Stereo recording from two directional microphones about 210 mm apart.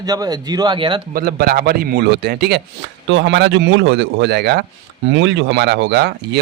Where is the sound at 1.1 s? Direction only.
45° right (ahead or behind).